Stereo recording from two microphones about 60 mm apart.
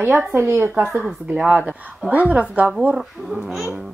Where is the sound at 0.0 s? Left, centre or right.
Right.